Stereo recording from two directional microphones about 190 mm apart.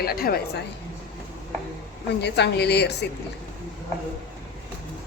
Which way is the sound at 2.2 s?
60° left (ahead or behind).